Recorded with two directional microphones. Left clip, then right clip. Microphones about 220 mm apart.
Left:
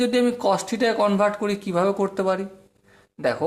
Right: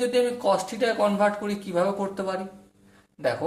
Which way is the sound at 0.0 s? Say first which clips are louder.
Left 2 dB; 45° left (ahead or behind).